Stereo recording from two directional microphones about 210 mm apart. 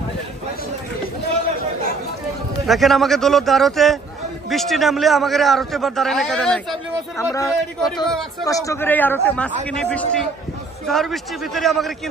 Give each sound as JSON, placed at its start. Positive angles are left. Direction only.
{"t": 2.6, "sound": "a man's voice", "side_deg": 0}
{"t": 7.2, "sound": "a man's voice", "side_deg": 15}